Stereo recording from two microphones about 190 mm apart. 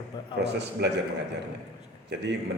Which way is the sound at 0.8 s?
60° right (ahead or behind).